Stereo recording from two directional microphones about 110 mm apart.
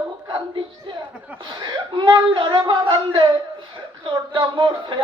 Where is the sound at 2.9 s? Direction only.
45° right (ahead or behind).